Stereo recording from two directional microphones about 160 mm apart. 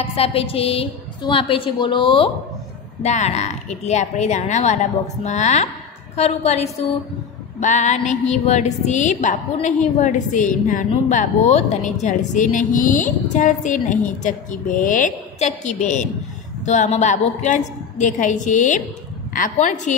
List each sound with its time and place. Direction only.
0.0 s a woman's voice: 35° left (ahead or behind)
3.0 s female singing: 45° left (ahead or behind)